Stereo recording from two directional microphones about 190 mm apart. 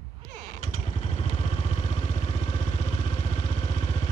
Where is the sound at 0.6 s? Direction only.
35° left (ahead or behind).